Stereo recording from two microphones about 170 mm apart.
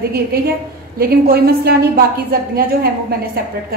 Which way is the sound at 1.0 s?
65° right (ahead or behind).